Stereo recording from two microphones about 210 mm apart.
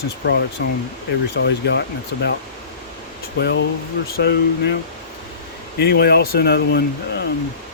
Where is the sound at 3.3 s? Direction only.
55° left (ahead or behind).